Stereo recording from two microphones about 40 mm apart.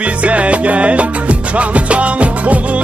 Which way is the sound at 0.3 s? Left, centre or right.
Right.